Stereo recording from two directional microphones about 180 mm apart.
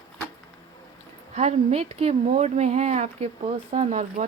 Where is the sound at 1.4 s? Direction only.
35° right (ahead or behind).